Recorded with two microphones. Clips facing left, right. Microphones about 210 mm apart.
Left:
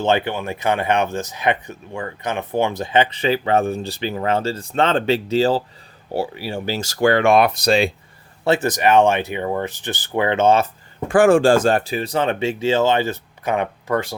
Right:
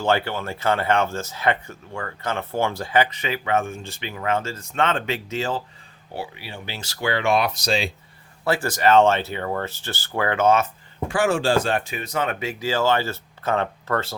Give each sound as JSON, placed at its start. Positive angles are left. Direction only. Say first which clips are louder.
{"t": 0.0, "sound": "speech", "louder": "left 3 dB", "side_deg": 20}
{"t": 8.4, "sound": "speech", "louder": "left 3 dB", "side_deg": 20}
{"t": 11.1, "sound": "speech", "louder": "left 7 dB", "side_deg": 50}